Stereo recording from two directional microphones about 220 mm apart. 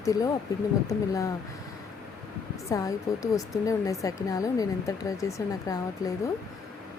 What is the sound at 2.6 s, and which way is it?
Speech, 15° left (ahead or behind).